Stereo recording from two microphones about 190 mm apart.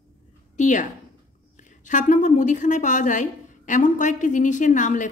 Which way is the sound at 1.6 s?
40° left (ahead or behind).